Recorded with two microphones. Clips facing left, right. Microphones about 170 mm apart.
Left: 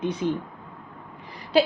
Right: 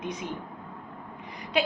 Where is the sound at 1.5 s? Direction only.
35° left (ahead or behind).